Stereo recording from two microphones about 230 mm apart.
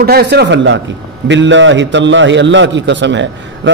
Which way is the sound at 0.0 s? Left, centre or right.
Right.